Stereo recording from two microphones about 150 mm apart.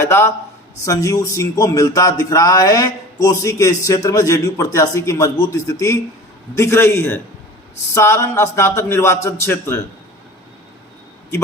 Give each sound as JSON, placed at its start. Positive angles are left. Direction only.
{"t": 0.0, "sound": "a man's voice", "side_deg": 15}